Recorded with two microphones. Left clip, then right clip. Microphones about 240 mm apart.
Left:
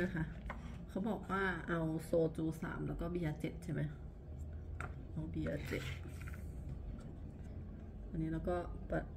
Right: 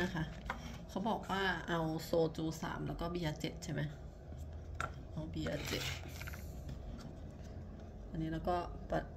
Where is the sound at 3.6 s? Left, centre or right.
Centre.